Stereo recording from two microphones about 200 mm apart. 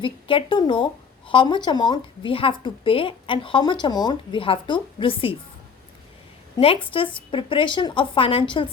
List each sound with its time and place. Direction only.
0.0 s a woman's voice: 25° left (ahead or behind)
6.6 s a woman's voice: 30° left (ahead or behind)